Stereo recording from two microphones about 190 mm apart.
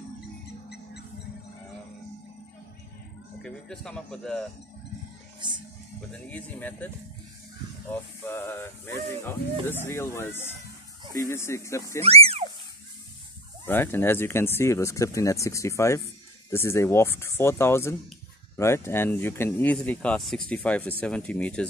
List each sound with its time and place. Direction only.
3.4 s speech: 5° left (ahead or behind)
5.4 s speech: 25° right (ahead or behind)
6.1 s speech: 5° left (ahead or behind)
7.9 s speech: 10° left (ahead or behind)
12.0 s a sound: 30° right (ahead or behind)
13.7 s speech: 10° left (ahead or behind)